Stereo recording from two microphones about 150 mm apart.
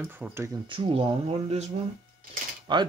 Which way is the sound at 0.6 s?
35° right (ahead or behind).